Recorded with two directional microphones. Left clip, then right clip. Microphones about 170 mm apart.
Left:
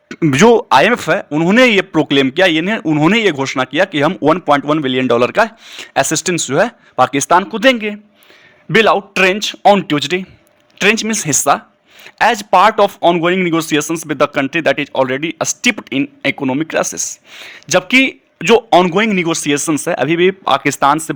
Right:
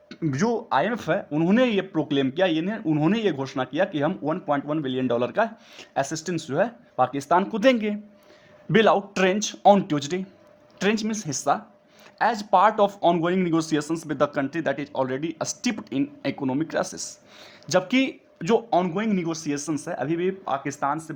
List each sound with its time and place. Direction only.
0.2 s a man's voice: 40° left (ahead or behind)
0.7 s a man's voice: 25° left (ahead or behind)
4.2 s a man's voice: 35° left (ahead or behind)
16.9 s speech: 60° left (ahead or behind)
17.3 s a man's voice: 20° left (ahead or behind); by 21.0 s 40° left (ahead or behind)